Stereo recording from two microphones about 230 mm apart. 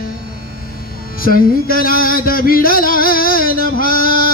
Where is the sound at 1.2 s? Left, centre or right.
Left.